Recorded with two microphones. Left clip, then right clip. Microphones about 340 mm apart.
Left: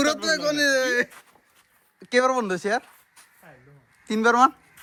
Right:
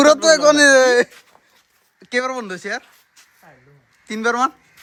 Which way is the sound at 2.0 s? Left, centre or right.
Centre.